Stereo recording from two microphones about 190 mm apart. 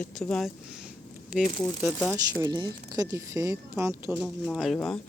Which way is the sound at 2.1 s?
20° right (ahead or behind).